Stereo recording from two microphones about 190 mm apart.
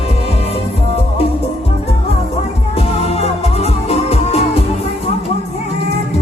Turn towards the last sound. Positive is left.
turn(degrees=35)  # may be behind; listen again after turning